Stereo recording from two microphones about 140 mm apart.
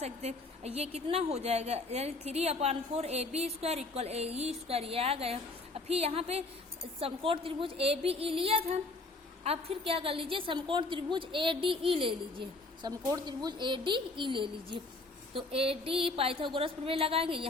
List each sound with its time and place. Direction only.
0.0 s a woman's voice: 50° right (ahead or behind)